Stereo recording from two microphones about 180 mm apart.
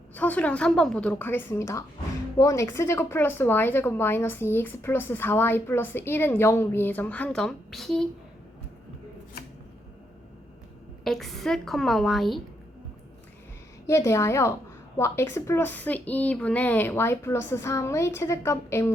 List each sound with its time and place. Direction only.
0.1 s speech: 10° left (ahead or behind)
11.0 s a woman's voice: centre (ahead or behind)
13.8 s speech: 15° left (ahead or behind)